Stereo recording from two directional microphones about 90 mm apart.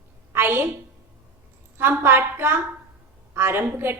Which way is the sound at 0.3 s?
25° right (ahead or behind).